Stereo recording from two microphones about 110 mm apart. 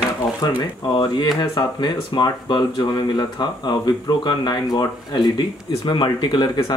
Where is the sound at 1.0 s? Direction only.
40° left (ahead or behind).